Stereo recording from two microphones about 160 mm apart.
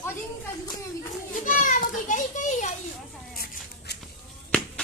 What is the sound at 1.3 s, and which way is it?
Children playing, 55° left (ahead or behind).